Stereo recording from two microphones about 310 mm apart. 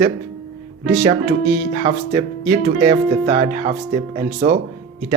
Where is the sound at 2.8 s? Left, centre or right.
Centre.